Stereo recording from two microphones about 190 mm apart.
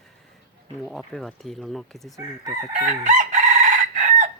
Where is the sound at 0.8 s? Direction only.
Centre (ahead or behind).